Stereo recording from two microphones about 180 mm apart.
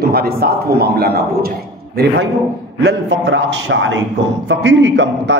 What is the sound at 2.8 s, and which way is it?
A man's voice, 75° right (ahead or behind).